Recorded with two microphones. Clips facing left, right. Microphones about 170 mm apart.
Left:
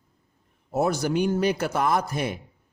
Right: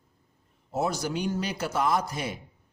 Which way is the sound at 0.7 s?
55° left (ahead or behind).